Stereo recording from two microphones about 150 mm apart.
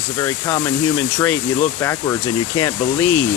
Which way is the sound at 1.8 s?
20° left (ahead or behind).